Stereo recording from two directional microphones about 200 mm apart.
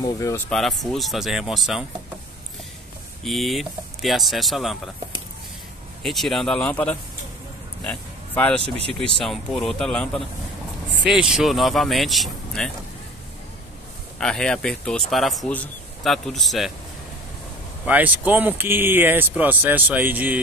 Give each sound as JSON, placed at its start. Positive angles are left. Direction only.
{"t": 0.0, "sound": "speech", "side_deg": 15}
{"t": 0.5, "sound": "speech", "side_deg": 0}
{"t": 3.3, "sound": "speech", "side_deg": 0}
{"t": 6.0, "sound": "speech", "side_deg": 0}
{"t": 7.8, "sound": "a sound", "side_deg": 5}
{"t": 8.6, "sound": "speech", "side_deg": -30}
{"t": 9.0, "sound": "speech", "side_deg": 0}
{"t": 14.1, "sound": "speech", "side_deg": 5}
{"t": 17.8, "sound": "speech", "side_deg": -10}